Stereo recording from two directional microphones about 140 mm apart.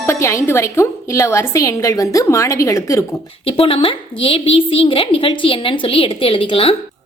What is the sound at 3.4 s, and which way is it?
A woman's voice, 40° left (ahead or behind).